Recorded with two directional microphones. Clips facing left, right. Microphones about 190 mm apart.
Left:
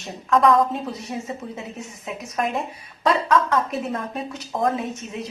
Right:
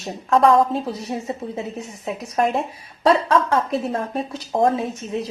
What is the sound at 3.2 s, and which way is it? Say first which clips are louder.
Speech: right 1 dB; 30° right (ahead or behind).